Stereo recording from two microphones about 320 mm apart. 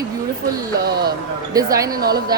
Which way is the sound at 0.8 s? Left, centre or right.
Right.